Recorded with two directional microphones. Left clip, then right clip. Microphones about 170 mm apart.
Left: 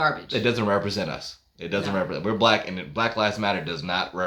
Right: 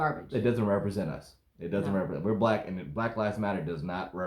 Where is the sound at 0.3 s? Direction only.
20° left (ahead or behind).